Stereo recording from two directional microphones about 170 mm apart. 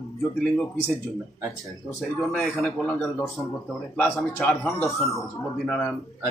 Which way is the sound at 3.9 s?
10° left (ahead or behind).